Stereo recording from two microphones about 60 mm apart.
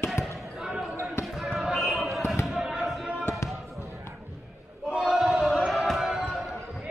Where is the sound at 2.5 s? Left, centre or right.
Centre.